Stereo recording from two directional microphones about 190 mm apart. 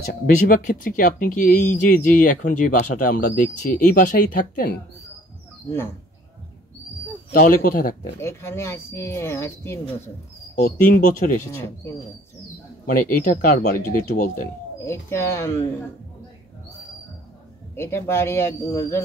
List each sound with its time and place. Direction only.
0.0 s speech: 50° left (ahead or behind)
7.3 s speech: 45° left (ahead or behind)
8.2 s speech: 15° left (ahead or behind)
10.5 s speech: 45° left (ahead or behind)
12.8 s speech: 45° left (ahead or behind)
14.8 s speech: 15° left (ahead or behind)
17.7 s speech: 10° left (ahead or behind)